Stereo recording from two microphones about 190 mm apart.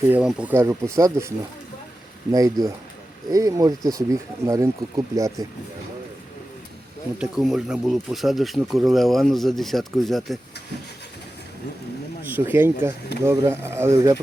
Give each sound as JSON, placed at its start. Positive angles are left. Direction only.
{"t": 0.1, "sound": "speech", "side_deg": -5}
{"t": 2.3, "sound": "speech", "side_deg": -20}
{"t": 7.2, "sound": "speech", "side_deg": 0}
{"t": 12.2, "sound": "speech", "side_deg": -10}